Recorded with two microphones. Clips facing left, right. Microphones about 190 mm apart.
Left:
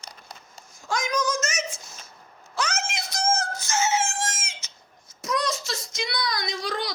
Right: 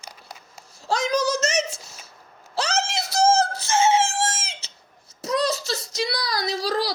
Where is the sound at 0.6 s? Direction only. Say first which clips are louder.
Right 5 dB; 35° right (ahead or behind).